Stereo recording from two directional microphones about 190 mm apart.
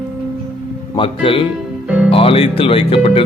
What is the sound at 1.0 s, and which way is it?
Speech, 25° left (ahead or behind).